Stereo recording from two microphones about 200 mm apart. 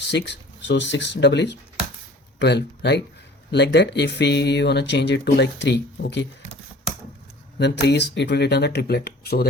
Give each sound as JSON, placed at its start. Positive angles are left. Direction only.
{"t": 0.1, "sound": "speech", "side_deg": 60}
{"t": 7.6, "sound": "speech", "side_deg": 55}